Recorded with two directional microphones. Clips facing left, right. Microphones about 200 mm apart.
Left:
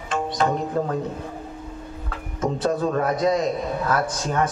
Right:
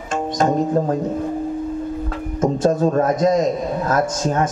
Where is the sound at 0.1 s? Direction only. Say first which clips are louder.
Right 4 dB; 45° right (ahead or behind).